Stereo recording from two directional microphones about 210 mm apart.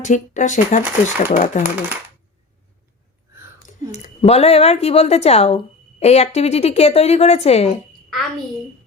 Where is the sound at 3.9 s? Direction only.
30° left (ahead or behind).